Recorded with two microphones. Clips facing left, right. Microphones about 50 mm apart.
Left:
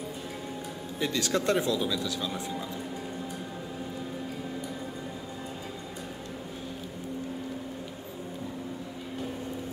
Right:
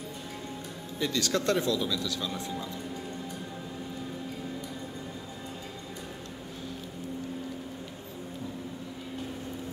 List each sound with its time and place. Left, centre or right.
0.9 s speech: left